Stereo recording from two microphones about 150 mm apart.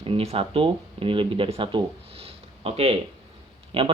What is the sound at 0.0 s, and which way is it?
Speech, 40° right (ahead or behind).